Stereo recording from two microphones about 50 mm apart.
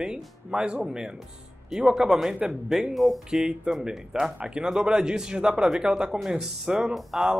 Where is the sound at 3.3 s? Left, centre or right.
Centre.